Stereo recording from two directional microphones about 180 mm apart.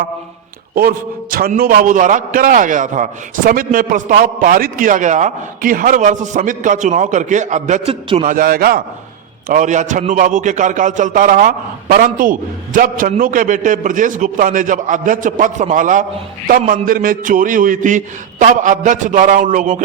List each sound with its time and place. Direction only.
0.8 s a man's voice: 55° right (ahead or behind); by 8.3 s 35° right (ahead or behind)
8.3 s a man's voice: 50° right (ahead or behind)
9.5 s a man's voice: 40° right (ahead or behind)